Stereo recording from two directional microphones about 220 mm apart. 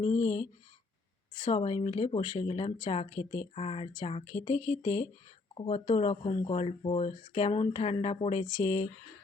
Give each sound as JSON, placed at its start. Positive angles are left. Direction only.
{"t": 0.0, "sound": "speech", "side_deg": 20}
{"t": 1.5, "sound": "speech", "side_deg": 25}